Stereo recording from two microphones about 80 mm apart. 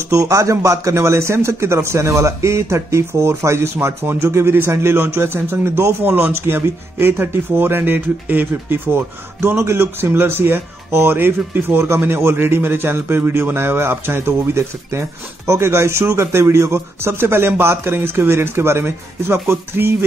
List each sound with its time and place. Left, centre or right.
0.0 s speech: right